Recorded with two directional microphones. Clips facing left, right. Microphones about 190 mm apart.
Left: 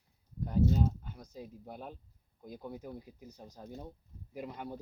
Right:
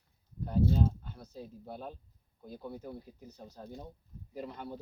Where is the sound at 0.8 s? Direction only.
10° left (ahead or behind).